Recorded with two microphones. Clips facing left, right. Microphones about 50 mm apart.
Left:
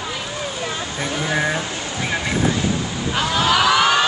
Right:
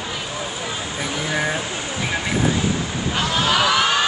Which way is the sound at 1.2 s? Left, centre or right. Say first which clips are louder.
Left 2 dB; centre.